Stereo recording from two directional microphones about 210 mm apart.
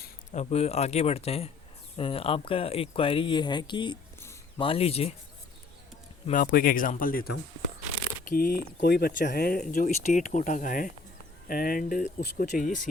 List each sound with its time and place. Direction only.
0.0 s speech: 35° left (ahead or behind); by 4.6 s 15° left (ahead or behind)
4.6 s speech: 25° left (ahead or behind)
6.2 s speech: 40° left (ahead or behind)